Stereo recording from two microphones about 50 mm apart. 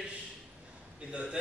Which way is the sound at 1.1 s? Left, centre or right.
Centre.